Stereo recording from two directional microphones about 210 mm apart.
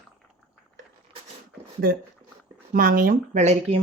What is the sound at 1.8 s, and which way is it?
Speech, 45° right (ahead or behind).